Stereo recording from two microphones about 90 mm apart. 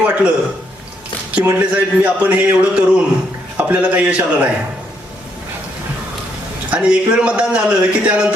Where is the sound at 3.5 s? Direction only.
15° right (ahead or behind).